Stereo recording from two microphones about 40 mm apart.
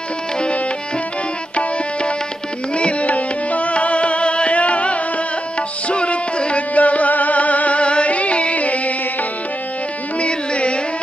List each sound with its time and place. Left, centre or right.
1.6 s tabla: left
2.7 s music: left
10.2 s music: left